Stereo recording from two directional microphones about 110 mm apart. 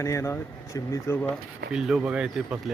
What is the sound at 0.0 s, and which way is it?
Speech, 25° left (ahead or behind).